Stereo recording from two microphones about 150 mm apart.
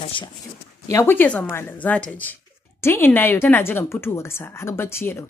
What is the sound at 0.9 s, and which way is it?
A woman's voice, 15° left (ahead or behind).